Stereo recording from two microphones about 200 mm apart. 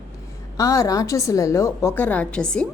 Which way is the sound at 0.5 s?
15° left (ahead or behind).